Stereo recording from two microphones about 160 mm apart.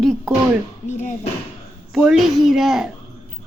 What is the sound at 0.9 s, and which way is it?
Speech, 50° left (ahead or behind).